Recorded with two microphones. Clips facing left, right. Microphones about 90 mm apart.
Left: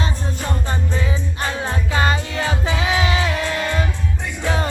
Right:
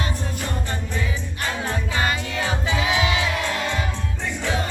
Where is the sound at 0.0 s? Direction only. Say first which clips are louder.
Left 2 dB; 25° left (ahead or behind).